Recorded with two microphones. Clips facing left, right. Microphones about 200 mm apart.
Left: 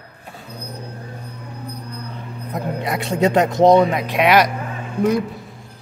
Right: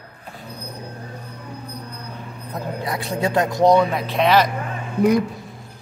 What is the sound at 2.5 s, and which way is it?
Speech, 20° left (ahead or behind).